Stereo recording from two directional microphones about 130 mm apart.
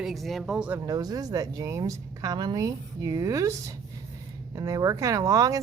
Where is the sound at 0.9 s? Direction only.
30° right (ahead or behind).